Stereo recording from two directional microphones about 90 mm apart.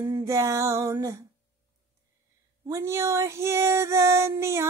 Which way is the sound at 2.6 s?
35° right (ahead or behind).